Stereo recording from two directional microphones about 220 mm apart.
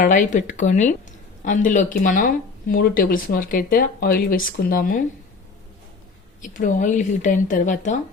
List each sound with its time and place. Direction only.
0.0 s speech: 35° left (ahead or behind)
6.4 s speech: 35° left (ahead or behind)